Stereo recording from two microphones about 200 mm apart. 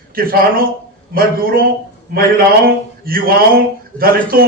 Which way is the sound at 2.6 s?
45° right (ahead or behind).